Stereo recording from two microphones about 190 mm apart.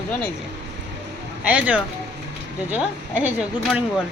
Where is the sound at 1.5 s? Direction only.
5° right (ahead or behind).